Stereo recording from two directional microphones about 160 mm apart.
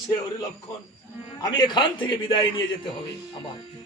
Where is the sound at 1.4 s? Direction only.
30° left (ahead or behind).